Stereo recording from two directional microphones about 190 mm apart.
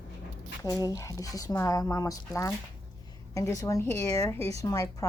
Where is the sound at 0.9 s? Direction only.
20° left (ahead or behind).